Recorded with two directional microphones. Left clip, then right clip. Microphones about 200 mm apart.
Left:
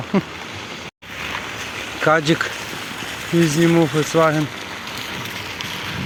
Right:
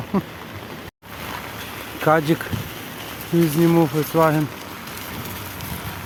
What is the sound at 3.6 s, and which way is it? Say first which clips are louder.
Speech: left 1 dB; centre (ahead or behind).